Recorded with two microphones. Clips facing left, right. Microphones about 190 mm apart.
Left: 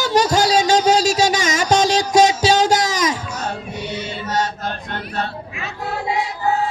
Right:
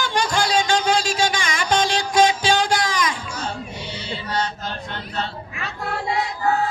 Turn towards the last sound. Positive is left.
turn(degrees=50)  # may be behind; listen again after turning